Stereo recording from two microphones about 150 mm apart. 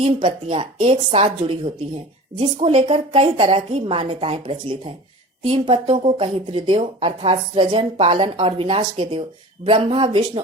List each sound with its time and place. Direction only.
0.0 s speech: 35° right (ahead or behind)